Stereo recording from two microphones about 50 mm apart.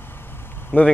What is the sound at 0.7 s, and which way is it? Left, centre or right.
Speech, left.